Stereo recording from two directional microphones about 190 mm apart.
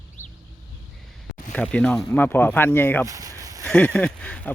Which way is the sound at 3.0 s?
15° right (ahead or behind).